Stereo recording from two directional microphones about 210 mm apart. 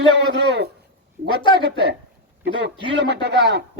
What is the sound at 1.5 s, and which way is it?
A man's voice, 50° right (ahead or behind).